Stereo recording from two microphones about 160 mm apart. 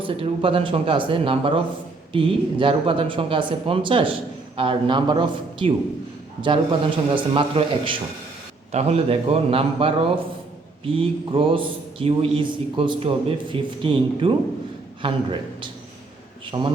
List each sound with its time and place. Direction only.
0.0 s a man's voice: 35° right (ahead or behind)